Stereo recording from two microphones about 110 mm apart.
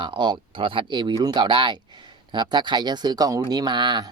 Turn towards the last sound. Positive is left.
turn(degrees=-40)  # may be behind; listen again after turning